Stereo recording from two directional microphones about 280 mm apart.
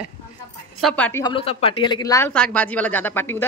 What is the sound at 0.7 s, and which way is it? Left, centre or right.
A woman's voice, centre.